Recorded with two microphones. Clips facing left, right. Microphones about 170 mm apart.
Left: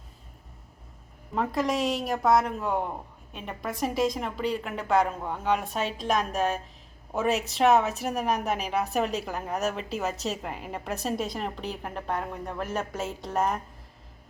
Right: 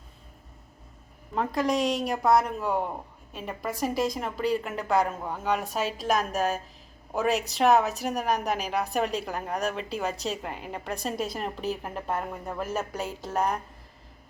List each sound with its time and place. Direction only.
1.4 s a woman's voice: centre (ahead or behind)